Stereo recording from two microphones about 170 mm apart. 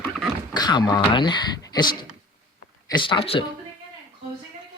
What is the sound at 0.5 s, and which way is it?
Speech, 25° left (ahead or behind).